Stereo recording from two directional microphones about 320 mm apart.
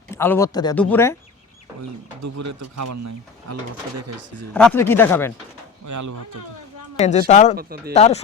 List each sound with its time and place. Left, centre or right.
0.1 s speech: centre
2.2 s speech: right
4.5 s speech: centre
5.8 s speech: right
7.0 s speech: left
7.5 s speech: right
7.9 s speech: centre